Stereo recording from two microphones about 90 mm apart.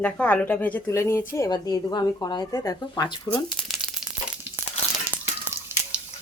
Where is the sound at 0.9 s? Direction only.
30° left (ahead or behind).